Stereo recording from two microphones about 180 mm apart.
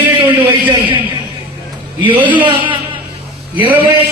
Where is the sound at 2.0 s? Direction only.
25° right (ahead or behind).